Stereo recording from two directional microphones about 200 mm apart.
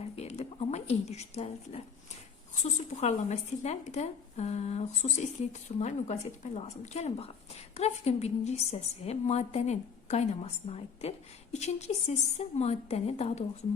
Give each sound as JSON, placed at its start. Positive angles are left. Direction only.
{"t": 0.0, "sound": "speech", "side_deg": 30}